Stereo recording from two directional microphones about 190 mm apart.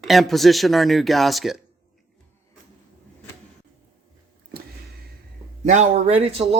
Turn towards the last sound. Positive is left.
turn(degrees=-30)  # may be behind; listen again after turning